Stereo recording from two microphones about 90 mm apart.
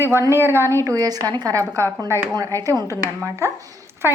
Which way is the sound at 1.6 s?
35° right (ahead or behind).